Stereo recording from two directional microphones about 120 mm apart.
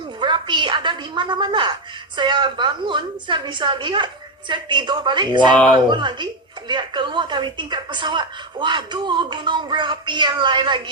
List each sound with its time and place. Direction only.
0.2 s a woman's voice: 40° right (ahead or behind)